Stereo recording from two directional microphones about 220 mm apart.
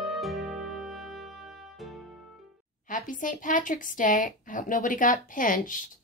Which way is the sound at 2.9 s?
35° left (ahead or behind).